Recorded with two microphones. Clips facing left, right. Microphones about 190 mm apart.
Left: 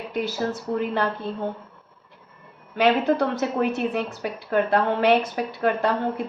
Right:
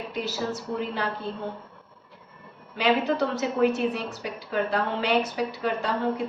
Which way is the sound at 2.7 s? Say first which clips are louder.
Left 4 dB; 55° left (ahead or behind).